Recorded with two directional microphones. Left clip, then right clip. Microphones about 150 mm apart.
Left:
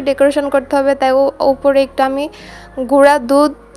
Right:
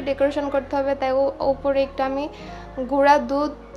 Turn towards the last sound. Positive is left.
turn(degrees=50)  # may be behind; listen again after turning